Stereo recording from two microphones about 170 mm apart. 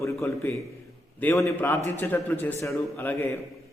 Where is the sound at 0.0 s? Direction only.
15° left (ahead or behind).